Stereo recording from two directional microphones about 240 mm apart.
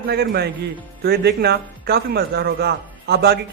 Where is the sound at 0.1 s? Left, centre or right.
Right.